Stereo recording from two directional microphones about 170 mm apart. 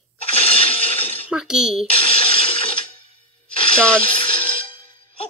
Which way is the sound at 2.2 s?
35° left (ahead or behind).